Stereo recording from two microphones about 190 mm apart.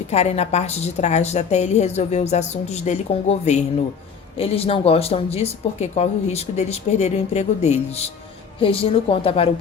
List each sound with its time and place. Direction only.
0.1 s a woman's voice: 35° left (ahead or behind)